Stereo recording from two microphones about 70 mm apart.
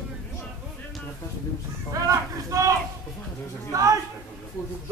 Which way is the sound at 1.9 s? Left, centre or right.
Right.